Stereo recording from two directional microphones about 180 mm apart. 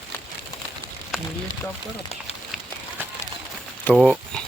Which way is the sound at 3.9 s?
Centre (ahead or behind).